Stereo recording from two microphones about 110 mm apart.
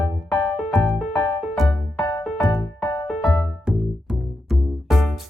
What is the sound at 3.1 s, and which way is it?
Music, 5° left (ahead or behind).